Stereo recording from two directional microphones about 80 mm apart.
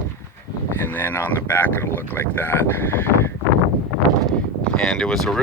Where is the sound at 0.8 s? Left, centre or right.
Left.